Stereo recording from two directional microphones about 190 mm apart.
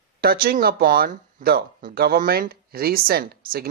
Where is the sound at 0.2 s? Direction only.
50° right (ahead or behind).